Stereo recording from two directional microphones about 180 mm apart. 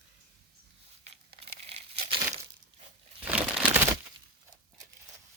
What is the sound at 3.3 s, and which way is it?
Crumpling, 10° right (ahead or behind).